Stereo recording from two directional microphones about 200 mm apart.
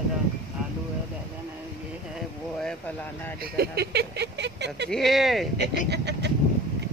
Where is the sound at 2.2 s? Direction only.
Centre (ahead or behind).